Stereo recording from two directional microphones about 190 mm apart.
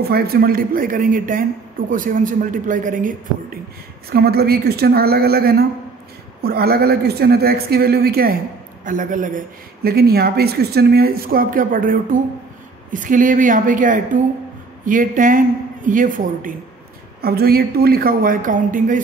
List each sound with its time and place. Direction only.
0.0 s a woman's voice: 55° right (ahead or behind)
4.1 s a woman's voice: 55° right (ahead or behind)
9.8 s a woman's voice: 55° right (ahead or behind)